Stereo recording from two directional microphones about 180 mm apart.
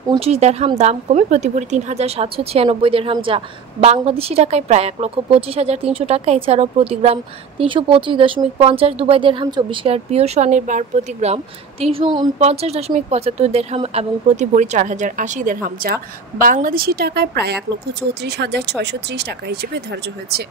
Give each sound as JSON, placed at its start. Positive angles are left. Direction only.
{"t": 0.2, "sound": "speech", "side_deg": -35}